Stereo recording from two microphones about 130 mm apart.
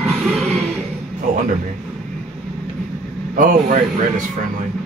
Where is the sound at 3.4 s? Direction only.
85° right.